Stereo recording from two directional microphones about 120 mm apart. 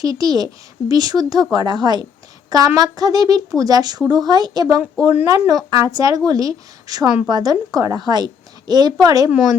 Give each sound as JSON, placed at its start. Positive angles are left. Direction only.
{"t": 0.0, "sound": "a woman's voice", "side_deg": -30}